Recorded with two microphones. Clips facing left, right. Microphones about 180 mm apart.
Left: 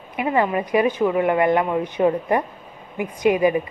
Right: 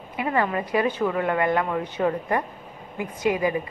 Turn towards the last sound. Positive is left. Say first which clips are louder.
# left 5 dB
turn(degrees=20)  # may be behind; listen again after turning